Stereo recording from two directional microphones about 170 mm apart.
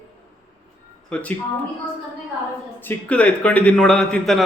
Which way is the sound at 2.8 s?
10° left (ahead or behind).